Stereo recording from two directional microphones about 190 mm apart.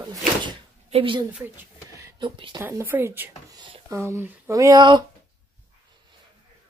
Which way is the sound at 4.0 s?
15° right (ahead or behind).